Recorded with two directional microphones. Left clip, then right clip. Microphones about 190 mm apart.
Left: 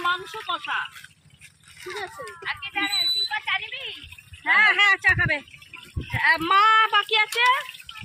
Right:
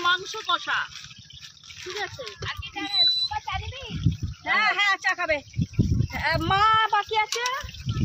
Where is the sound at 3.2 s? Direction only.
25° left (ahead or behind).